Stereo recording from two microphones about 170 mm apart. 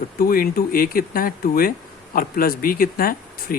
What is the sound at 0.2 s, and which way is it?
Speech, 60° left (ahead or behind).